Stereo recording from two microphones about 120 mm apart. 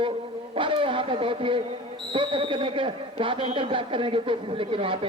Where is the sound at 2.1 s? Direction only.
45° right (ahead or behind).